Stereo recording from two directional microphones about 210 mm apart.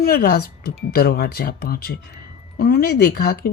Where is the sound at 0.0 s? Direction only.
45° left (ahead or behind).